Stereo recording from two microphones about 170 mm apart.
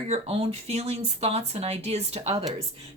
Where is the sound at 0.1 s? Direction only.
40° right (ahead or behind).